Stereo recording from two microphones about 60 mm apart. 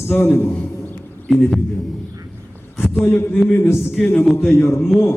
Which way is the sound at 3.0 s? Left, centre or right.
Left.